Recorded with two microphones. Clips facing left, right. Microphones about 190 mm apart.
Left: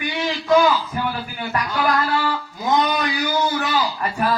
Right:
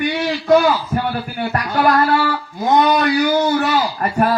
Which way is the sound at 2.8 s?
50° right (ahead or behind).